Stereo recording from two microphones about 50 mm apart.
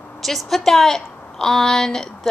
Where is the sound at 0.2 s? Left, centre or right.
Centre.